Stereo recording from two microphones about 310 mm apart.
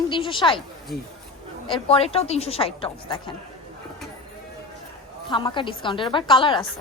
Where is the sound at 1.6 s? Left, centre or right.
Centre.